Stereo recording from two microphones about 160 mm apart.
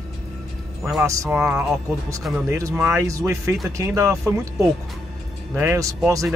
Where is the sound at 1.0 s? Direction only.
20° right (ahead or behind).